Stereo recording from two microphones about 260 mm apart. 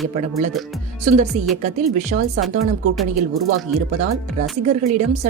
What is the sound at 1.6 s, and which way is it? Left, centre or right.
Speech, right.